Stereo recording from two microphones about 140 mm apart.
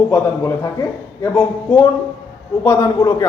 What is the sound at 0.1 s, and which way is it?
Speech, 20° left (ahead or behind).